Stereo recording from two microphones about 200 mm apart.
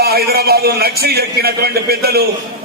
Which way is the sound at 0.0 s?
50° right (ahead or behind).